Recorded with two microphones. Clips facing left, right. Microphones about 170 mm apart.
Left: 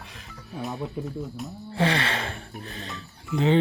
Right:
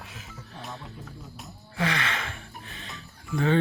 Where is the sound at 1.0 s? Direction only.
65° left (ahead or behind).